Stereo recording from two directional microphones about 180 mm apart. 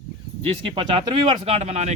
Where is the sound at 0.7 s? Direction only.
30° right (ahead or behind).